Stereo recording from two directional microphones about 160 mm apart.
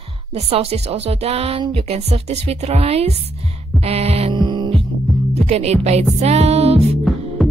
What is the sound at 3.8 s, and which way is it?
Heart sounds, 40° right (ahead or behind).